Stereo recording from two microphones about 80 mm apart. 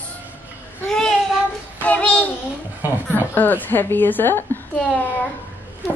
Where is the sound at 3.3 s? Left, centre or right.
Left.